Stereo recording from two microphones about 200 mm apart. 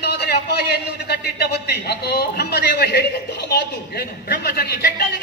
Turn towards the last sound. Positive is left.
turn(degrees=50)  # may be behind; listen again after turning